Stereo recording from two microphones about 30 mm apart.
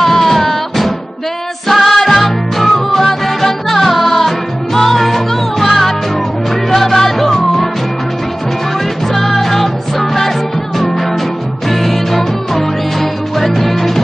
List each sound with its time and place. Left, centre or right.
0.0 s music: centre
9.1 s music: centre
11.7 s music: centre